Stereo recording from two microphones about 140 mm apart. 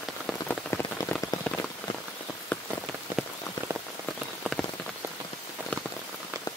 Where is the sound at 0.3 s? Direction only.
15° left (ahead or behind).